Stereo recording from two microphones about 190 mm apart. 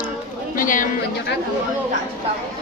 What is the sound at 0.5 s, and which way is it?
Chatter, 45° left (ahead or behind).